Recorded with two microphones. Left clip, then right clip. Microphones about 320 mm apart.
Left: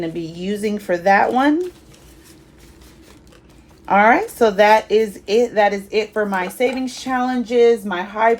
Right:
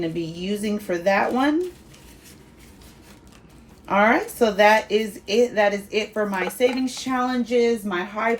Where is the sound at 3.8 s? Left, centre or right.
Left.